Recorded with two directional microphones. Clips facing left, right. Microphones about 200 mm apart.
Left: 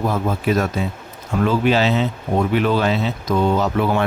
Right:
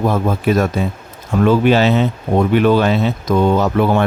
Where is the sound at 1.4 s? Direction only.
55° right (ahead or behind).